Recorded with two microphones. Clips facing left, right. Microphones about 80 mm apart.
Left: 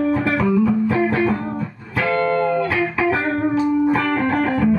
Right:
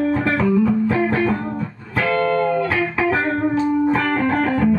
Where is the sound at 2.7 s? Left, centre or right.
Right.